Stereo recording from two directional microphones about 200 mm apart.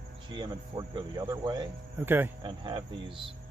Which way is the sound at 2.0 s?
10° right (ahead or behind).